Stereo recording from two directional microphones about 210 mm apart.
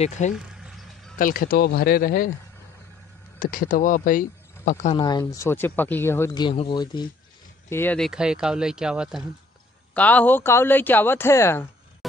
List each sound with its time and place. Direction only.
0.3 s a sound: centre (ahead or behind)
1.1 s speech: 40° left (ahead or behind)
3.3 s speech: 40° left (ahead or behind)
4.9 s speech: 20° left (ahead or behind)
7.7 s speech: 10° left (ahead or behind)
9.9 s speech: 5° left (ahead or behind)